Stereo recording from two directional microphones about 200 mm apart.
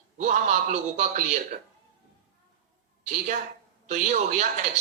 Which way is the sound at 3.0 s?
40° right (ahead or behind).